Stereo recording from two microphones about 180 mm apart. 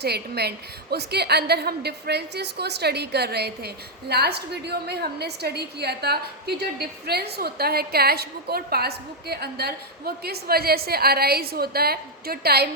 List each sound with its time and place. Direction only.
0.0 s a woman's voice: 65° right (ahead or behind)